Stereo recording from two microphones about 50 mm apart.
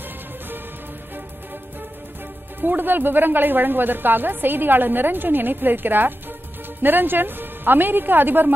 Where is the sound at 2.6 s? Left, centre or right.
Right.